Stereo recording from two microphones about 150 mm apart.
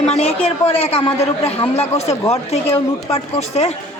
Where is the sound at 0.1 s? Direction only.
45° left (ahead or behind).